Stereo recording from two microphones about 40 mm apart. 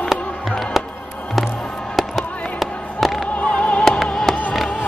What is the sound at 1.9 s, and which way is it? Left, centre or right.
Fireworks, centre.